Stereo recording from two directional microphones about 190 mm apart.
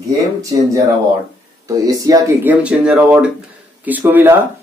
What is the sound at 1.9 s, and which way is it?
Speech, 20° right (ahead or behind).